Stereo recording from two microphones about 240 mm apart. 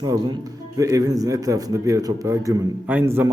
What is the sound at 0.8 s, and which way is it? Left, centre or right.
A man's voice, centre.